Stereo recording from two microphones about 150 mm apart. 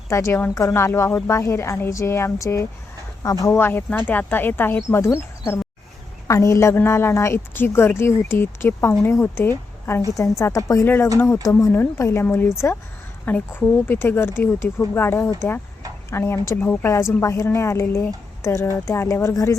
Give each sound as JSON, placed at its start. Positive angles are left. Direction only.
{"t": 0.1, "sound": "a woman's voice", "side_deg": 20}